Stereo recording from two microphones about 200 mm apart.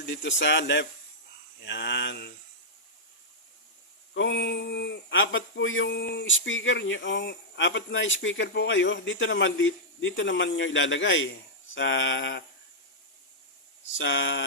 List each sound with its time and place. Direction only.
0.0 s speech: 65° left (ahead or behind)
4.1 s speech: 65° left (ahead or behind)
5.9 s speech: 55° left (ahead or behind)
13.9 s speech: 65° left (ahead or behind)